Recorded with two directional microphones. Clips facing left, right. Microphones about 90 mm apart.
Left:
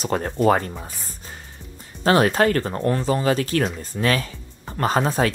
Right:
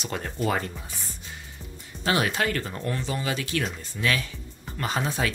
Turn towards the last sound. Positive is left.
turn(degrees=40)  # may be behind; listen again after turning